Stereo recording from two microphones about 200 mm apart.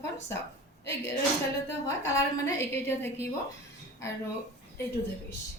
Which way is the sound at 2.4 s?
10° left (ahead or behind).